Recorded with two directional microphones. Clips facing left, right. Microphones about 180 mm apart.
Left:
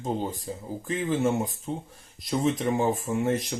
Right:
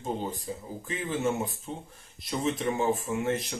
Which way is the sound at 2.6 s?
35° left (ahead or behind).